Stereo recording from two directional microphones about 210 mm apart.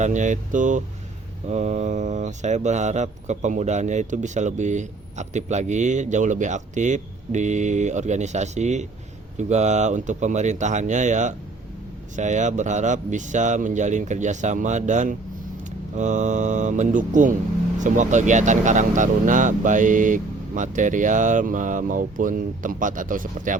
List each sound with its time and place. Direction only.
0.0 s speech: 35° right (ahead or behind)